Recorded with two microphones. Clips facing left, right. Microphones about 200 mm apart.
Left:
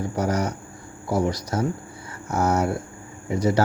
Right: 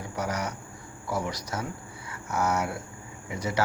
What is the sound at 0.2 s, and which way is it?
Speech, 35° left (ahead or behind).